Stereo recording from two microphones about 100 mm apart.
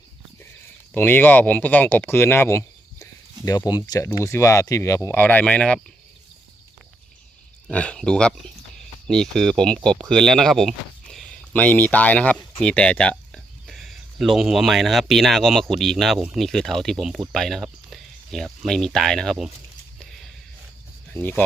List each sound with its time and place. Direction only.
0.9 s speech: 20° left (ahead or behind)
3.5 s speech: 40° left (ahead or behind)
4.9 s speech: 20° left (ahead or behind)
7.7 s speech: 10° left (ahead or behind)
20.0 s a sound: 5° left (ahead or behind)
21.1 s speech: 20° left (ahead or behind)